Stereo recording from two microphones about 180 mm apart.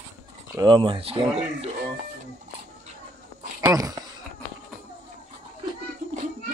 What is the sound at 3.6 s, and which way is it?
Dog, 20° right (ahead or behind).